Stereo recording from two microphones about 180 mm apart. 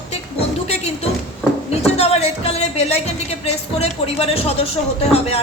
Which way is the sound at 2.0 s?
35° left (ahead or behind).